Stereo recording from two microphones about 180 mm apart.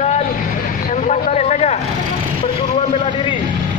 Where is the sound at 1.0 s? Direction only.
40° left (ahead or behind).